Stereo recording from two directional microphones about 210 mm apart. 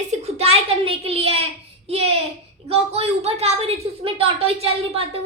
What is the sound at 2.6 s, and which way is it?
A woman's voice, 30° right (ahead or behind).